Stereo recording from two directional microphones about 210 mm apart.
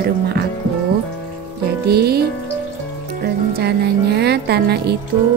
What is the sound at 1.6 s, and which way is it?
Music, 50° right (ahead or behind).